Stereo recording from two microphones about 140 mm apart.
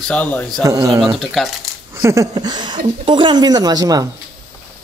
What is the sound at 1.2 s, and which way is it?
Speech, centre (ahead or behind).